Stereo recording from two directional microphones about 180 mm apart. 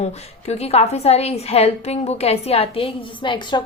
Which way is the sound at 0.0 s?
35° left (ahead or behind).